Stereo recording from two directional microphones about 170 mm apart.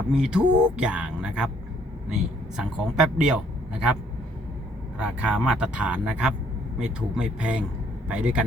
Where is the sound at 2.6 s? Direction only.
5° right (ahead or behind).